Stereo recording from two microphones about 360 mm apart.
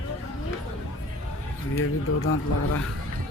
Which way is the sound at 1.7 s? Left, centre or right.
Left.